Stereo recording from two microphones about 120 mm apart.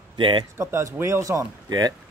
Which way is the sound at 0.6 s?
25° right (ahead or behind).